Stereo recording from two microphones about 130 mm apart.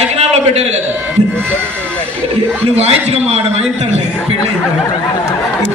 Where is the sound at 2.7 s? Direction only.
55° right (ahead or behind).